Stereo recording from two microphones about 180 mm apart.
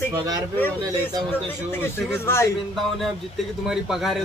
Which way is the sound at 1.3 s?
10° left (ahead or behind).